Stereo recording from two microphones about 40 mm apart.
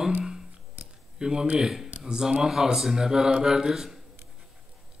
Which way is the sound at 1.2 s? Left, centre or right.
Centre.